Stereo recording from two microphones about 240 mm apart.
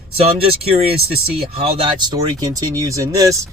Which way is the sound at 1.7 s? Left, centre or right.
Centre.